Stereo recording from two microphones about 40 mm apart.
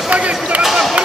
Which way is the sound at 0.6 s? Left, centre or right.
Centre.